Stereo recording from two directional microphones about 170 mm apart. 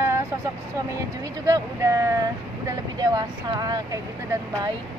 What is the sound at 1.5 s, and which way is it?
Speech, 20° right (ahead or behind).